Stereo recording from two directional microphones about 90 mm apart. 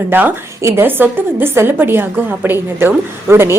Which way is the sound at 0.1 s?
25° right (ahead or behind).